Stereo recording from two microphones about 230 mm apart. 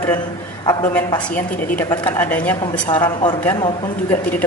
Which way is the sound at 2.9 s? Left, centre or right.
Left.